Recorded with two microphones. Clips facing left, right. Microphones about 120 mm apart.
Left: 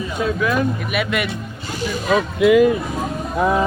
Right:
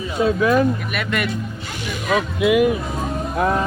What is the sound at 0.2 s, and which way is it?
Speech, 25° right (ahead or behind).